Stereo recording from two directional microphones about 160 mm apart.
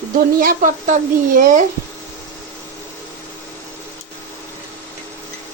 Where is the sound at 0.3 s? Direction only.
60° right (ahead or behind).